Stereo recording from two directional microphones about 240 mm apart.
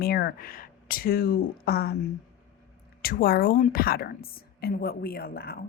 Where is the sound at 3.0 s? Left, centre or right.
Left.